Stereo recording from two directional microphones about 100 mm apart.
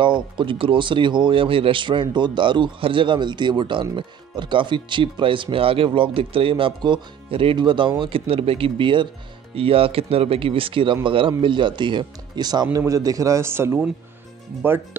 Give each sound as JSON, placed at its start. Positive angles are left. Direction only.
{"t": 0.0, "sound": "speech", "side_deg": -50}
{"t": 9.6, "sound": "a man's voice", "side_deg": -70}